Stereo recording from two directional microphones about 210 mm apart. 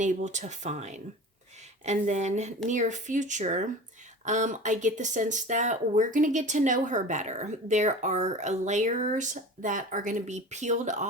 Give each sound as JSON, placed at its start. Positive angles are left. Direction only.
{"t": 0.0, "sound": "speech", "side_deg": -35}